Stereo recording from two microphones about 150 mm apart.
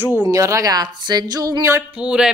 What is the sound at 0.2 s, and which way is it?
Speech, 20° right (ahead or behind).